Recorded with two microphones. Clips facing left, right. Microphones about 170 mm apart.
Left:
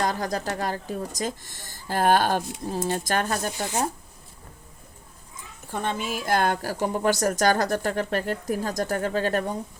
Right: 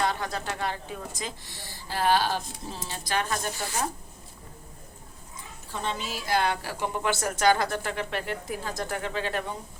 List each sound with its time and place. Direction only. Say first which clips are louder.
0.0 s a woman's voice: left 3 dB; 40° left (ahead or behind)
5.7 s a woman's voice: left 4 dB; 55° left (ahead or behind)